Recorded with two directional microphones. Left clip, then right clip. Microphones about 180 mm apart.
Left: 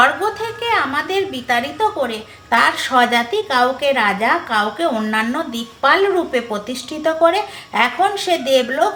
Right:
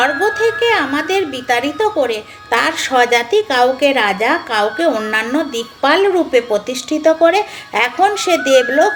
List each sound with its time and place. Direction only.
0.0 s a woman's voice: 35° right (ahead or behind)